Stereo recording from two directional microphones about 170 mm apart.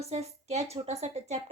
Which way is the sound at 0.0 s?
40° right (ahead or behind).